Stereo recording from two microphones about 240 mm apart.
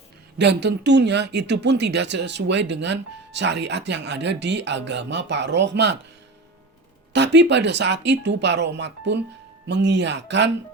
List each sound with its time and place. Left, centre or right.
0.3 s speech: right
7.1 s speech: right